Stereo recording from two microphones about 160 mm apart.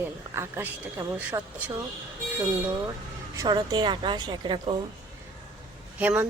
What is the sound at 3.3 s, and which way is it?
A woman's voice, 20° right (ahead or behind).